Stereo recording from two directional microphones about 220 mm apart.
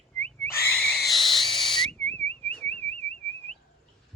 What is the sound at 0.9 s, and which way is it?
Owl, centre (ahead or behind).